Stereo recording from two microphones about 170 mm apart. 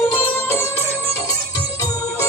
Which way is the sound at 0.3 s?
15° left (ahead or behind).